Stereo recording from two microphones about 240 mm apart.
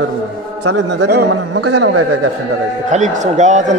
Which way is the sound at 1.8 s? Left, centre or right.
Right.